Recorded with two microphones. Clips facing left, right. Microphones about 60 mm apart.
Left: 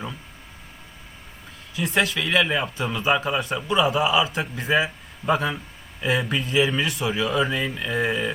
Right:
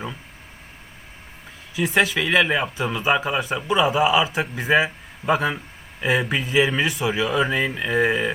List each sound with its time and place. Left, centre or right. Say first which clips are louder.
1.7 s a man's voice: right 3 dB; centre